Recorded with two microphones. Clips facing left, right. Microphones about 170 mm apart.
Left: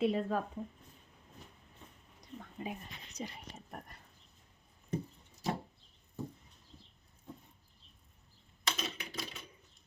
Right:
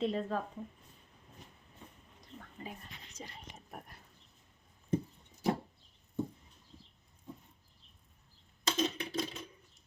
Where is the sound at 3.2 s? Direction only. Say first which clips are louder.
Left 6 dB; 15° left (ahead or behind).